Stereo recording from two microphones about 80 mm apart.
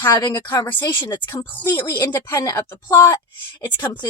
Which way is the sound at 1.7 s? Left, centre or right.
Left.